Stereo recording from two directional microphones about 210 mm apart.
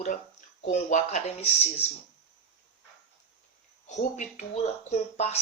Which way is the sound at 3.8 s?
35° left (ahead or behind).